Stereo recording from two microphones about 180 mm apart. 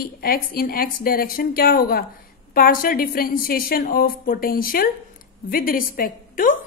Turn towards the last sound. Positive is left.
turn(degrees=50)  # may be behind; listen again after turning